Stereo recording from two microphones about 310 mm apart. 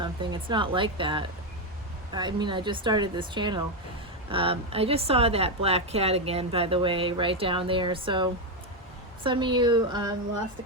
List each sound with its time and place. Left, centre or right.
0.0 s speech: centre